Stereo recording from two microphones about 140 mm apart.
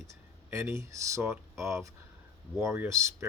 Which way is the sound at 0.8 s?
20° right (ahead or behind).